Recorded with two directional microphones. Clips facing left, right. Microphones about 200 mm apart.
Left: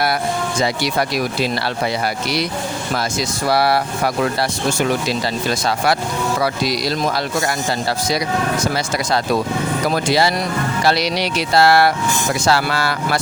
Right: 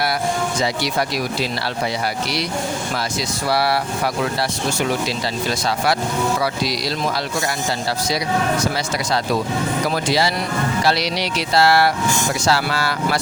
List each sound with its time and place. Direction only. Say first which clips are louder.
3.5 s speech: left 3 dB; 50° left (ahead or behind)
6.4 s speech: left 3 dB; 50° left (ahead or behind)
9.9 s speech: left 3 dB; 55° left (ahead or behind)